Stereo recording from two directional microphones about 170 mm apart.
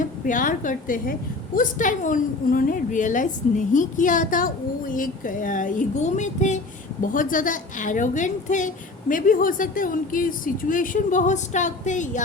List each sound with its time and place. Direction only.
0.0 s a woman's voice: 50° left (ahead or behind)